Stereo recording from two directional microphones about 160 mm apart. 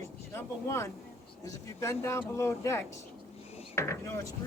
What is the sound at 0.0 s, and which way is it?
Vehicle, 15° left (ahead or behind).